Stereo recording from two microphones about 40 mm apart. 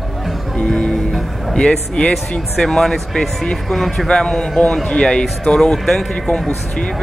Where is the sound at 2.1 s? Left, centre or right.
Centre.